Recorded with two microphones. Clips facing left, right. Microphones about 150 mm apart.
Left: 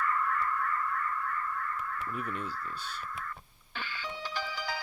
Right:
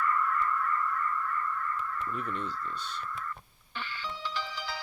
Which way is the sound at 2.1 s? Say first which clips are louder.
Right 1 dB; 50° left (ahead or behind).